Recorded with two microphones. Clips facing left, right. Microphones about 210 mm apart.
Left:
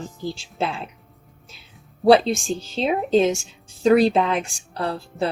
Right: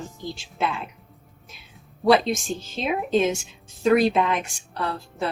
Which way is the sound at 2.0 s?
30° left (ahead or behind).